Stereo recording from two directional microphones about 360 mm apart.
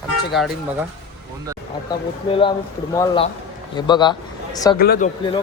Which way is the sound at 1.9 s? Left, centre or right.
Centre.